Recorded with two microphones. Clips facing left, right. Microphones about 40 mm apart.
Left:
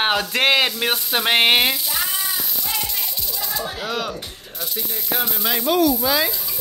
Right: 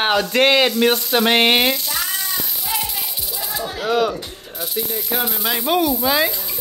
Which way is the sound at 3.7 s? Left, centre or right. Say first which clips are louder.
Right 7 dB; centre.